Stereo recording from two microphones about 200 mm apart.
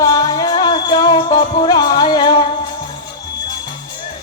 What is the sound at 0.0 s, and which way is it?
Music, 20° left (ahead or behind).